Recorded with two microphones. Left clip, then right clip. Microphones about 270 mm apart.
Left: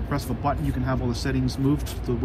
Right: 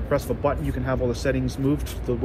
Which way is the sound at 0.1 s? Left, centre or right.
Centre.